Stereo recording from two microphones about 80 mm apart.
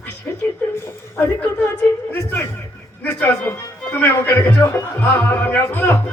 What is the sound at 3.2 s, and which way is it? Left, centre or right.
A man's voice, left.